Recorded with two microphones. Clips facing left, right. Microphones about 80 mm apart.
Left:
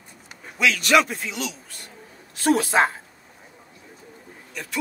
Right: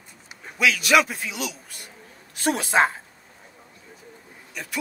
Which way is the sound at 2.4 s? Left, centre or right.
Centre.